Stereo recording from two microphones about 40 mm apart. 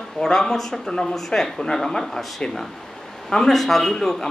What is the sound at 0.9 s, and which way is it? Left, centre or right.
Speech, centre.